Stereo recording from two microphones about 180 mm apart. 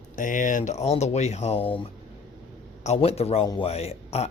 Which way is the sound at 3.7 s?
35° left (ahead or behind).